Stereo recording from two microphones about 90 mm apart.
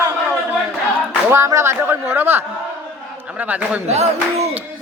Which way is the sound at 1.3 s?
30° right (ahead or behind).